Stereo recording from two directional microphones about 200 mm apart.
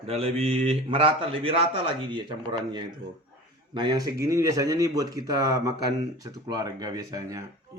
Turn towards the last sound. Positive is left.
turn(degrees=-15)  # may be behind; listen again after turning